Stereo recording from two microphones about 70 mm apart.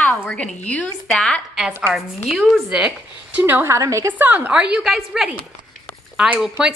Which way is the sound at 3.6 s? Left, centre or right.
Right.